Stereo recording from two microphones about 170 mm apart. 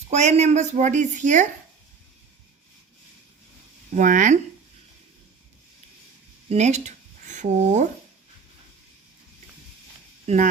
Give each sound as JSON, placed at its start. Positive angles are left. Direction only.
{"t": 0.1, "sound": "a woman's voice", "side_deg": -40}
{"t": 3.9, "sound": "a woman's voice", "side_deg": -45}
{"t": 6.5, "sound": "speech", "side_deg": -40}
{"t": 10.2, "sound": "a woman's voice", "side_deg": -45}